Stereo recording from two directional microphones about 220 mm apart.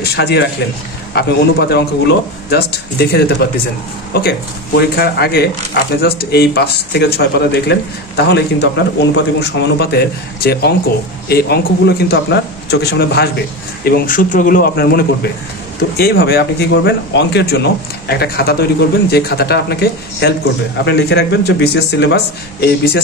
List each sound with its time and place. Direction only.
0.0 s speech: 45° left (ahead or behind)